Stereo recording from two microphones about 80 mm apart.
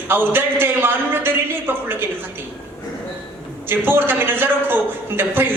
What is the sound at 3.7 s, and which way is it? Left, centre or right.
A man's voice, right.